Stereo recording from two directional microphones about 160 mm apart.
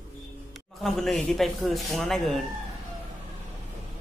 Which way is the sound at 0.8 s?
Centre (ahead or behind).